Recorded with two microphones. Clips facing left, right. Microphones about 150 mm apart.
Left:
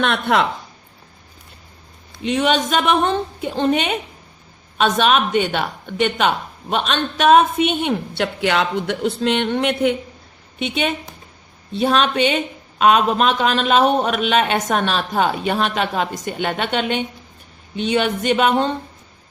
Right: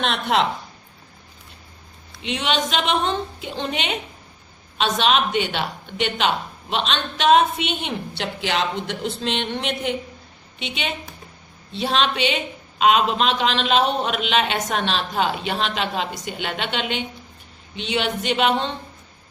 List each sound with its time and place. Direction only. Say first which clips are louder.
0.0 s speech: left 3 dB; 60° left (ahead or behind)
2.2 s a woman's voice: left 6 dB; 50° left (ahead or behind)